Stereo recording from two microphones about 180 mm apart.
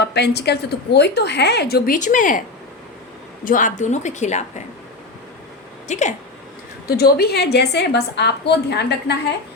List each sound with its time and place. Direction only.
0.0 s a woman's voice: 65° left (ahead or behind)
2.0 s speech: 45° left (ahead or behind)
3.4 s a woman's voice: 45° left (ahead or behind)
5.9 s a woman's voice: 40° left (ahead or behind)
6.8 s a woman's voice: 60° left (ahead or behind)